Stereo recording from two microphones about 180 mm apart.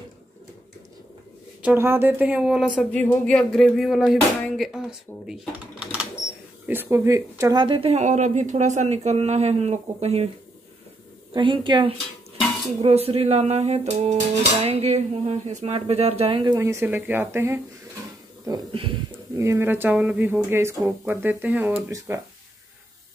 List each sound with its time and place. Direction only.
1.6 s speech: 10° right (ahead or behind)
6.7 s music: 15° right (ahead or behind); by 10.3 s 35° right (ahead or behind)
11.3 s a woman's voice: 25° right (ahead or behind)
12.8 s music: 35° right (ahead or behind); by 17.6 s 15° right (ahead or behind)
18.4 s a woman's voice: 20° right (ahead or behind)
19.3 s speech: 15° right (ahead or behind)